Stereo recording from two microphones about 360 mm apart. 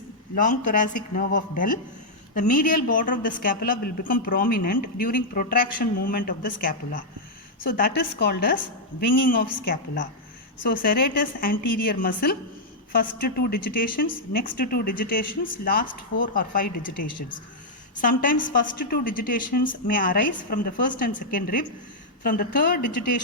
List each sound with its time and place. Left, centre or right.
0.3 s a woman's voice: left